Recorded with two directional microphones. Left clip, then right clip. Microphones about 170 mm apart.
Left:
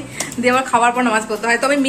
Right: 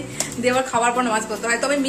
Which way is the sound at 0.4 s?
Centre (ahead or behind).